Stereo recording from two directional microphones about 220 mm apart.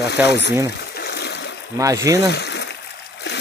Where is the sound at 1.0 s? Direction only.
50° left (ahead or behind).